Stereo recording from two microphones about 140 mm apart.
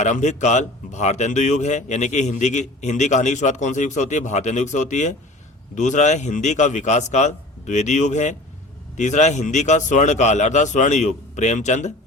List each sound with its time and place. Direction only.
0.0 s speech: 55° left (ahead or behind)